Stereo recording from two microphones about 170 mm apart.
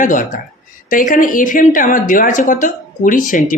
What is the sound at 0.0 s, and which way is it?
Speech, 50° left (ahead or behind).